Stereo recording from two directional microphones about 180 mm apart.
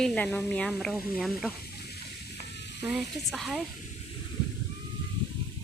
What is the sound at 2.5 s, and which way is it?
Stir, 70° left (ahead or behind).